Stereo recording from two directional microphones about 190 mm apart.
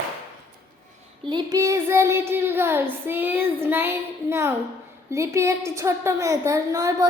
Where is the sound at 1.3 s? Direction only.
20° right (ahead or behind).